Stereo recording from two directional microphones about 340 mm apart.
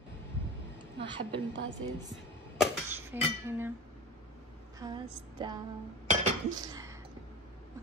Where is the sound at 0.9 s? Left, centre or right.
Right.